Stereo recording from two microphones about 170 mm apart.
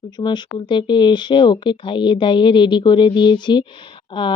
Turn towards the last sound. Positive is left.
turn(degrees=30)  # may be behind; listen again after turning